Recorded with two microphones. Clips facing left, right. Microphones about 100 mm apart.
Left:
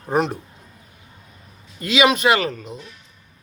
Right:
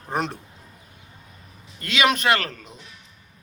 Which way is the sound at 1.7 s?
5° left (ahead or behind).